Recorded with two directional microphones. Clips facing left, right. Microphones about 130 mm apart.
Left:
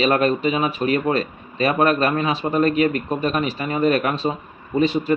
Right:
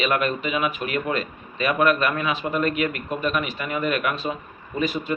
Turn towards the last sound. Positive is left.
turn(degrees=30)  # may be behind; listen again after turning